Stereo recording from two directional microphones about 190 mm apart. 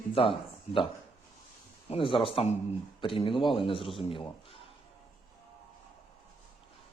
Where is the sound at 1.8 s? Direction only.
30° left (ahead or behind).